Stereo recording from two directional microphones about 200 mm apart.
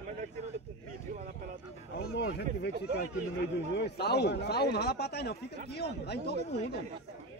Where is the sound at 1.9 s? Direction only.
60° left (ahead or behind).